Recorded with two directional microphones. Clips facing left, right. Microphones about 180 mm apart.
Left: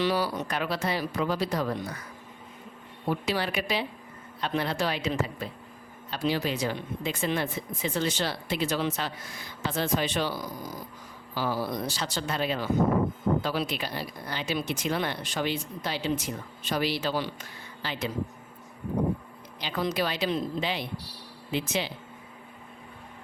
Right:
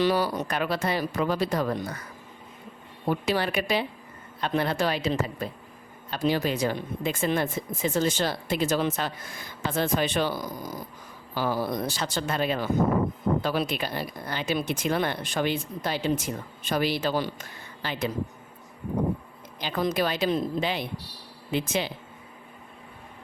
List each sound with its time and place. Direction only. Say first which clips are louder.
0.0 s speech: right 3 dB; 45° right (ahead or behind)
3.1 s a woman's voice: right 3 dB; 50° right (ahead or behind)
19.5 s speech: right 3 dB; 45° right (ahead or behind)